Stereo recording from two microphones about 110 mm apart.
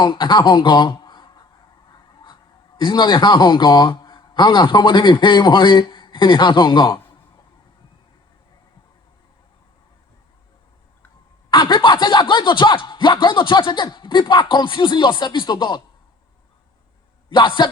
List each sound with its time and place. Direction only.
0.0 s speech: 45° left (ahead or behind)
11.5 s a sound: 45° left (ahead or behind)
17.2 s a man's voice: 50° left (ahead or behind)